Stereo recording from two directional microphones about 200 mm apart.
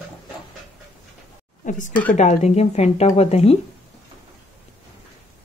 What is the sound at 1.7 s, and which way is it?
Speech, 40° left (ahead or behind).